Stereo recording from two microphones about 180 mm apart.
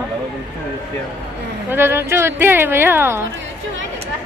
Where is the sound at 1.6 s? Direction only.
10° right (ahead or behind).